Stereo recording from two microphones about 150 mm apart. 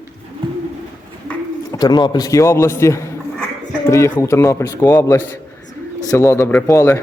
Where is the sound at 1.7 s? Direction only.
25° left (ahead or behind).